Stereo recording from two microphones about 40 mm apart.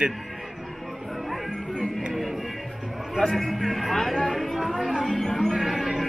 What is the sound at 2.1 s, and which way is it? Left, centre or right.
Music, centre.